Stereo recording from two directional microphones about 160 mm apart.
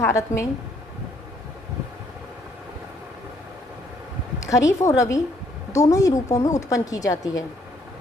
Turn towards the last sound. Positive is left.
turn(degrees=20)  # may be behind; listen again after turning